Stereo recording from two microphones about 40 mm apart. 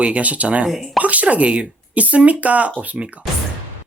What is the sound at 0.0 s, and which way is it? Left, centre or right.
Speech, right.